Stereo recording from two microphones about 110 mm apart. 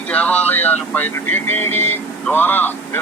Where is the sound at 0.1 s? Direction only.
15° left (ahead or behind).